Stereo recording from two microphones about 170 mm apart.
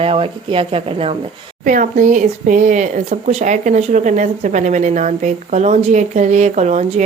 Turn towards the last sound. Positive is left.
turn(degrees=-40)  # may be behind; listen again after turning